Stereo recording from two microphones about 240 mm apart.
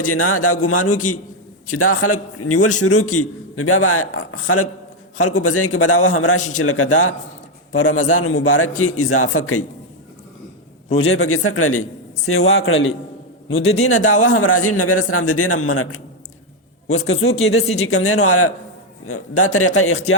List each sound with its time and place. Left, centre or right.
0.1 s a man's voice: left
10.9 s a man's voice: left
13.5 s a man's voice: left
13.7 s a man's voice: left
17.1 s a man's voice: left